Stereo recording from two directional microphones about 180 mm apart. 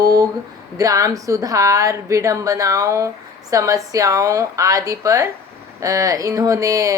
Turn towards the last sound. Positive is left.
turn(degrees=-20)  # may be behind; listen again after turning